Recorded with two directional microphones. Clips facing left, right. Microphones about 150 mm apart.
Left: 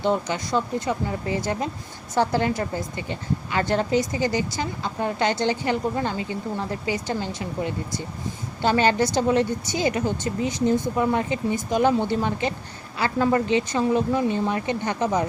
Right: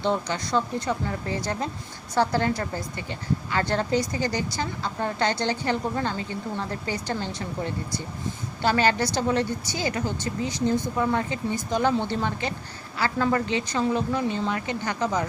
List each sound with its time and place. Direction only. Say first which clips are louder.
0.0 s speech: left 2 dB; 15° left (ahead or behind)